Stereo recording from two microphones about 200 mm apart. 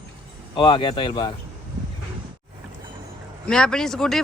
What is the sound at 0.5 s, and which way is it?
Speech, 25° left (ahead or behind).